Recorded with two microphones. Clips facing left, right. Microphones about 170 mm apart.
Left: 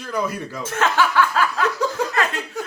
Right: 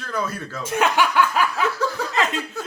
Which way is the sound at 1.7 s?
15° left (ahead or behind).